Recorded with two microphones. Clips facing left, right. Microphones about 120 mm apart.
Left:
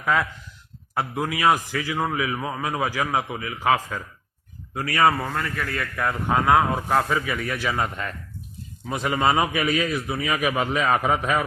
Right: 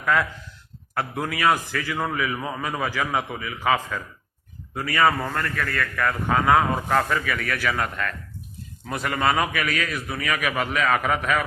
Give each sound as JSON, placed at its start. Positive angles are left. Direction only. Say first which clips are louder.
{"t": 0.0, "sound": "a man's voice", "louder": "even", "side_deg": 15}